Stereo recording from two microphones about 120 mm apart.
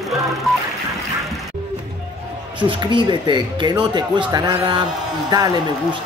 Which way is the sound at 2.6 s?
40° right (ahead or behind).